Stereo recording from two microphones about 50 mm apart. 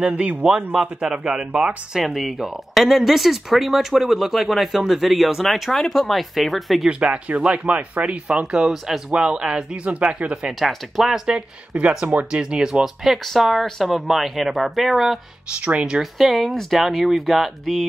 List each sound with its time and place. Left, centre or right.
0.0 s a man's voice: right
0.7 s speech: centre
6.9 s speech: right
8.6 s speech: centre
9.1 s speech: centre
10.7 s speech: centre
12.0 s speech: right; by 15.1 s centre
15.6 s speech: right
16.0 s speech: centre